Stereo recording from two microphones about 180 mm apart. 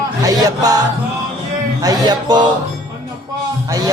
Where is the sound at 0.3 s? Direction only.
20° right (ahead or behind).